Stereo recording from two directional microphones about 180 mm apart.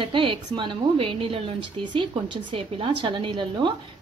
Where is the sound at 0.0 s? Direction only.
30° right (ahead or behind).